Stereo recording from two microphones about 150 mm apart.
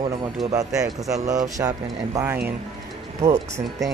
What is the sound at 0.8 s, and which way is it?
Speech, 25° right (ahead or behind).